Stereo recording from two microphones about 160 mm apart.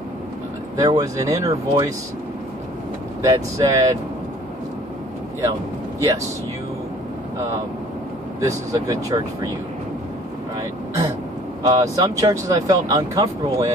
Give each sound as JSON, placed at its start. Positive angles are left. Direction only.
{"t": 0.7, "sound": "speech", "side_deg": -20}
{"t": 3.2, "sound": "speech", "side_deg": -20}
{"t": 8.4, "sound": "speech", "side_deg": -20}
{"t": 11.6, "sound": "speech", "side_deg": -20}